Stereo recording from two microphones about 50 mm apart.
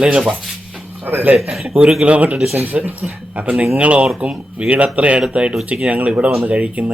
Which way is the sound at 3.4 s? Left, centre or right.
Right.